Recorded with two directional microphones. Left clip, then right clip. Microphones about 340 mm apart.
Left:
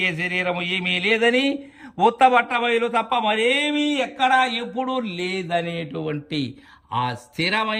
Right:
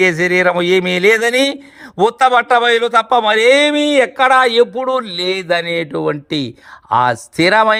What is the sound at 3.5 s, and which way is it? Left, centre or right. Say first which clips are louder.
A man's voice: right 10 dB; right.